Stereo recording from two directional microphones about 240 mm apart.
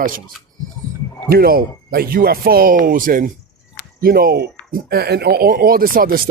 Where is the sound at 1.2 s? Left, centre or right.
Right.